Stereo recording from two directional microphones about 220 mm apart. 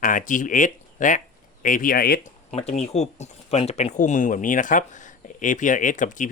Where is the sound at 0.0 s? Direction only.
35° left (ahead or behind).